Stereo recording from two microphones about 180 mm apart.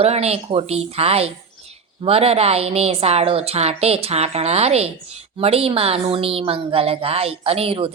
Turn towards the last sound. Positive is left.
turn(degrees=-30)  # may be behind; listen again after turning